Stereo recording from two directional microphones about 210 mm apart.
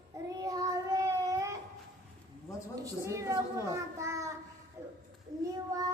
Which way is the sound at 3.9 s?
15° right (ahead or behind).